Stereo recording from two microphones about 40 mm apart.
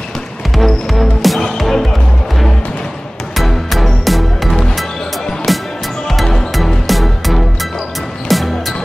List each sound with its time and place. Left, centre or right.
0.6 s music: centre
3.3 s music: centre